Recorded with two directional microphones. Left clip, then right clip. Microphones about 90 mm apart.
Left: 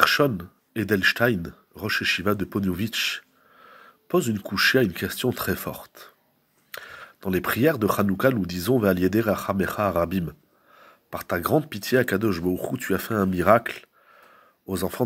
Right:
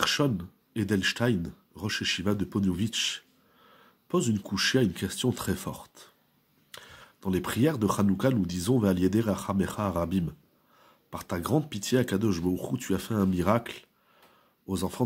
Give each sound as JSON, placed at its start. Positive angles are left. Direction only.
{"t": 0.0, "sound": "speech", "side_deg": -30}
{"t": 10.8, "sound": "a sound", "side_deg": -20}
{"t": 11.6, "sound": "speech", "side_deg": -30}